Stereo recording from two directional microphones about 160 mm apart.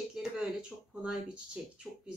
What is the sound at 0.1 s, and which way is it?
Speech, 5° right (ahead or behind).